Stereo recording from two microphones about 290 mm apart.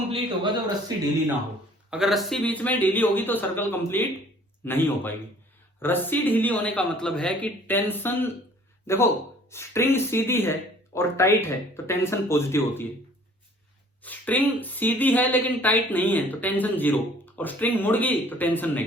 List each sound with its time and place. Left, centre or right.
0.1 s speech: centre
1.9 s speech: centre
14.0 s speech: centre